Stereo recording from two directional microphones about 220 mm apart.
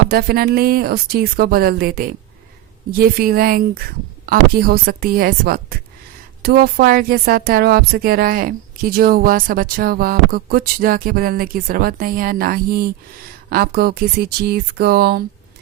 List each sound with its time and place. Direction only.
0.1 s speech: 45° right (ahead or behind)